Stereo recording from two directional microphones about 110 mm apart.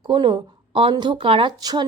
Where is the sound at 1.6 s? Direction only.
35° right (ahead or behind).